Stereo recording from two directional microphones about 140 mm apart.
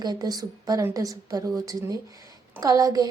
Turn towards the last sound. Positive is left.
turn(degrees=-25)  # may be behind; listen again after turning